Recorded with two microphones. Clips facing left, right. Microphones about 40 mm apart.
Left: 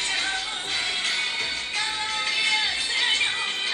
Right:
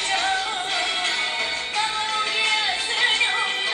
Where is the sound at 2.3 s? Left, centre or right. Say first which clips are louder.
Even; centre.